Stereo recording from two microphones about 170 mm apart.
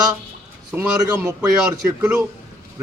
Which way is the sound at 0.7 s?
20° right (ahead or behind).